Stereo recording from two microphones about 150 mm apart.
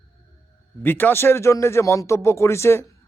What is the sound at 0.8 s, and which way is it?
Speech, 10° left (ahead or behind).